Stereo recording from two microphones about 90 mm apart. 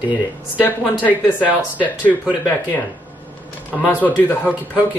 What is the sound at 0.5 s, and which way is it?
Speech, 20° left (ahead or behind).